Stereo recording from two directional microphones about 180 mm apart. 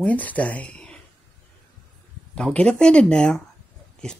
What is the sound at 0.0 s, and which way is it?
Speech, 10° left (ahead or behind).